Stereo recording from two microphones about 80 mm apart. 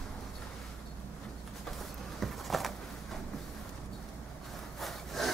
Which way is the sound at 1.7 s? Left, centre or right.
Centre.